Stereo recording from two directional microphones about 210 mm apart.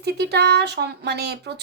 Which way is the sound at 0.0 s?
50° right (ahead or behind).